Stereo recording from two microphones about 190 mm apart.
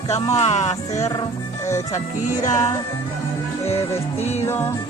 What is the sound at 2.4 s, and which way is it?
Music, 20° left (ahead or behind).